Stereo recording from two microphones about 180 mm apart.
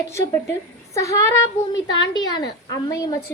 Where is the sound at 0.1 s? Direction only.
15° left (ahead or behind).